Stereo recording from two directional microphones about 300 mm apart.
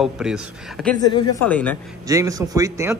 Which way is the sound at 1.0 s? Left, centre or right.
Centre.